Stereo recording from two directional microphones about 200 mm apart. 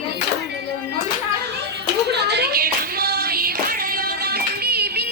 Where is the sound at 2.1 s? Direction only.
55° right (ahead or behind).